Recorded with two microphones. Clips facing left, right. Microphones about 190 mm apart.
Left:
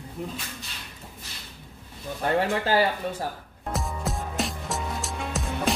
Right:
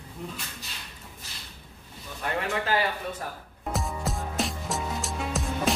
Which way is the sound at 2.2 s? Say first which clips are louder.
Left 5 dB; 30° left (ahead or behind).